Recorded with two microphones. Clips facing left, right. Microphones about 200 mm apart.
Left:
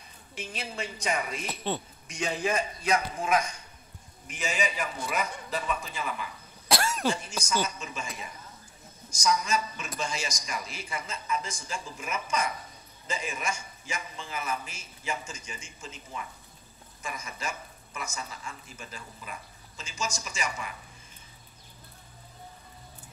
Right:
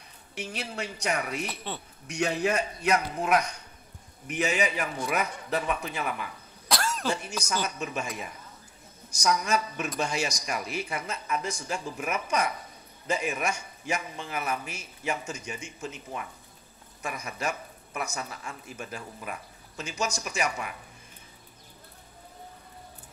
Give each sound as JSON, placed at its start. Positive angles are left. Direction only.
{"t": 0.3, "sound": "a man's voice", "side_deg": -65}
{"t": 1.5, "sound": "a man's voice", "side_deg": 20}
{"t": 2.0, "sound": "a man's voice", "side_deg": -65}
{"t": 6.7, "sound": "cough", "side_deg": 10}
{"t": 7.2, "sound": "a man's voice", "side_deg": -65}